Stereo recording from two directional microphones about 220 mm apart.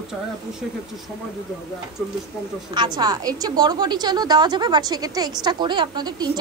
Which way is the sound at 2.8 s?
20° right (ahead or behind).